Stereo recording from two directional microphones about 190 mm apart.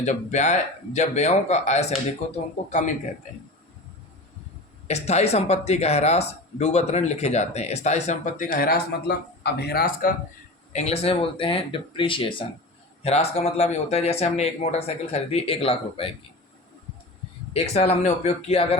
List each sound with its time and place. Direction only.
0.0 s speech: 40° left (ahead or behind)
4.9 s speech: 35° left (ahead or behind); by 10.2 s 50° left (ahead or behind)
10.7 s speech: 35° left (ahead or behind)
17.5 s speech: 35° left (ahead or behind)